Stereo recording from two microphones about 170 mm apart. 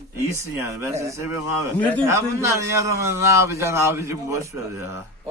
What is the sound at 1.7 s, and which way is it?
Speech, 10° left (ahead or behind).